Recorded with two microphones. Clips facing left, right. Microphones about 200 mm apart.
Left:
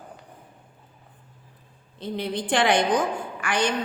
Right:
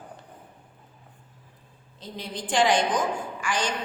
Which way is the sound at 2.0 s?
60° left (ahead or behind).